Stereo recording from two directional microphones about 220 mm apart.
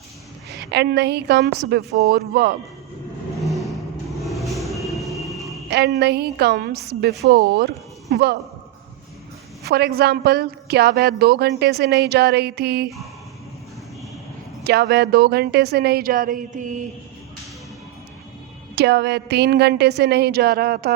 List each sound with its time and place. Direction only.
0.6 s a woman's voice: 50° right (ahead or behind)
3.3 s vehicle: centre (ahead or behind)
5.7 s a woman's voice: 50° right (ahead or behind)
9.6 s a woman's voice: 45° right (ahead or behind)
14.6 s a woman's voice: 50° right (ahead or behind)
18.8 s a woman's voice: 50° right (ahead or behind)